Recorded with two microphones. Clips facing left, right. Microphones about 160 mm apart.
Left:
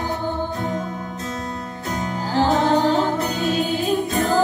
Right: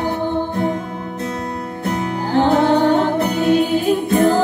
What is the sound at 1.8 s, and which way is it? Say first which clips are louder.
Music: right 5 dB; 55° right (ahead or behind).